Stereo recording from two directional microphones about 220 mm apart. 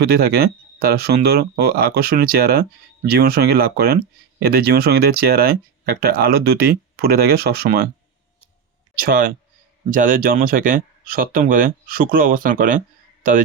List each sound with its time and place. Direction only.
0.0 s speech: 45° right (ahead or behind)
9.0 s speech: 40° right (ahead or behind)